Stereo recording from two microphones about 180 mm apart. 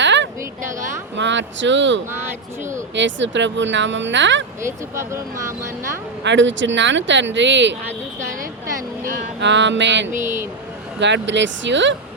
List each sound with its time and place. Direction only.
0.0 s a sound: 85° right
1.1 s speech: 90° right
4.6 s speech: 15° right (ahead or behind)
6.2 s speech: 90° right
9.4 s mantra: 85° right
10.2 s speech: 15° right (ahead or behind)
11.0 s speech: 80° right